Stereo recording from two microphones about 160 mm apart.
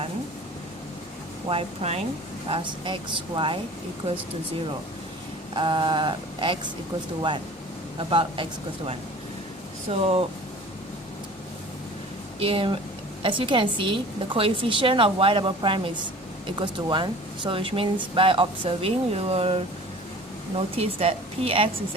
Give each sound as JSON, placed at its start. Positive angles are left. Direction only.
{"t": 1.5, "sound": "a woman's voice", "side_deg": -40}
{"t": 5.5, "sound": "a woman's voice", "side_deg": -30}
{"t": 7.9, "sound": "a woman's voice", "side_deg": -30}
{"t": 9.9, "sound": "a woman's voice", "side_deg": -40}
{"t": 12.4, "sound": "a woman's voice", "side_deg": -35}
{"t": 20.7, "sound": "a woman's voice", "side_deg": -40}